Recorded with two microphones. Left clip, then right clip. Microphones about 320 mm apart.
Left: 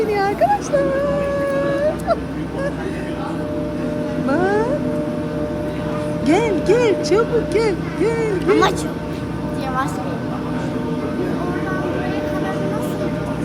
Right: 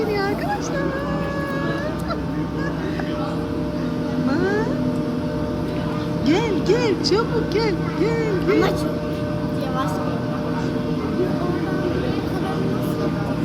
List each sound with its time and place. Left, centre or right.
6.2 s speech: centre